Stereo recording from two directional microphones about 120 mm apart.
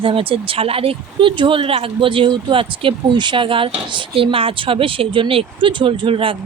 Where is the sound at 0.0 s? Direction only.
50° right (ahead or behind).